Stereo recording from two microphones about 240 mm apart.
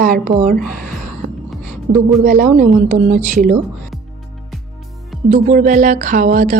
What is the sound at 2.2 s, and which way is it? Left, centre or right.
A woman's voice, right.